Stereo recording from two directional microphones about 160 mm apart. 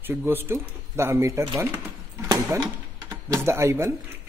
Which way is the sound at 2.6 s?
20° right (ahead or behind).